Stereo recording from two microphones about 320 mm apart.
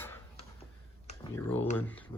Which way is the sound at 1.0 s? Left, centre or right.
Centre.